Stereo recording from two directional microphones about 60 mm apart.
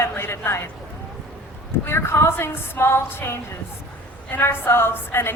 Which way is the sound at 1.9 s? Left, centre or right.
Left.